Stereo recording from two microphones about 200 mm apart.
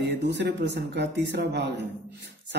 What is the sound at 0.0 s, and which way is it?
Speech, 60° right (ahead or behind).